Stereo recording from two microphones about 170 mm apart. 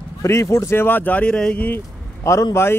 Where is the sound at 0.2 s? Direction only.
15° left (ahead or behind).